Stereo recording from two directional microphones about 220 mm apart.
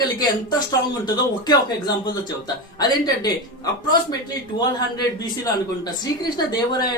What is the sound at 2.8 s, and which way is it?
A man's voice, 20° left (ahead or behind).